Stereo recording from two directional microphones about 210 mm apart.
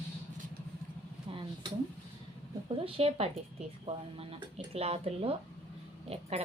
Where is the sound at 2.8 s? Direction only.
30° right (ahead or behind).